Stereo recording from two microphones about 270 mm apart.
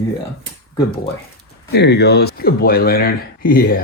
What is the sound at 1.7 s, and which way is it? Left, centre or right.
Speech, left.